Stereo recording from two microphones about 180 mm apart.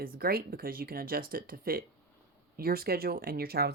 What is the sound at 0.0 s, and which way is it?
Speech, 55° right (ahead or behind).